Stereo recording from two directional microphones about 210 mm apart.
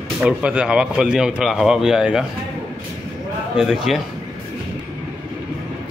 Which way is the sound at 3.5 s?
Centre (ahead or behind).